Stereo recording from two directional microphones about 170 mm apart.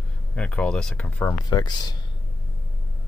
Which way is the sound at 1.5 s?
25° left (ahead or behind).